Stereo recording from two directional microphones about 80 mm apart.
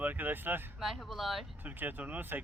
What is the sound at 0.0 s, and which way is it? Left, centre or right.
Speech, right.